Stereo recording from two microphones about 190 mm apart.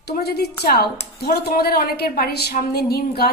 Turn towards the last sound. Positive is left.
turn(degrees=55)  # may be behind; listen again after turning